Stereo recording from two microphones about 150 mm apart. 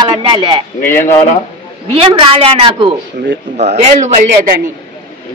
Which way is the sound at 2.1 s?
40° right (ahead or behind).